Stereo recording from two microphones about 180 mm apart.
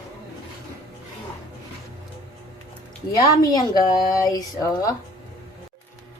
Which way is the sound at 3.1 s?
20° left (ahead or behind).